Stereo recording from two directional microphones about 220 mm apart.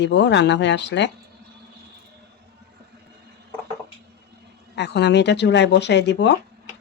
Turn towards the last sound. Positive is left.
turn(degrees=50)  # may be behind; listen again after turning